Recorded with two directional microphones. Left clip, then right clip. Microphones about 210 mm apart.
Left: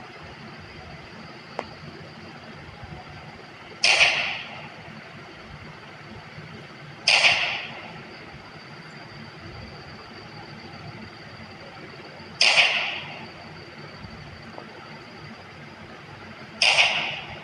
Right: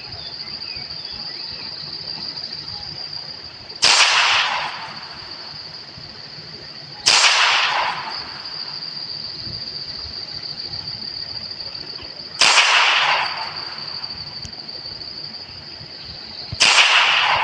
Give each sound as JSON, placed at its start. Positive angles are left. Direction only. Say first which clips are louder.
{"t": 3.8, "sound": "whip", "louder": "right 5 dB", "side_deg": -40}
{"t": 7.0, "sound": "whip", "louder": "right 5 dB", "side_deg": -40}
{"t": 12.4, "sound": "whip", "louder": "right 6 dB", "side_deg": -35}
{"t": 16.6, "sound": "whip", "louder": "right 7 dB", "side_deg": -40}